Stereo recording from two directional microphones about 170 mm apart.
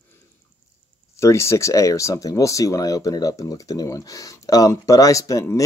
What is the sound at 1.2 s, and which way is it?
Speech, 15° left (ahead or behind).